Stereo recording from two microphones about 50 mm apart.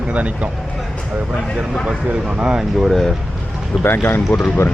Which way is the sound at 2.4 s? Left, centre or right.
Centre.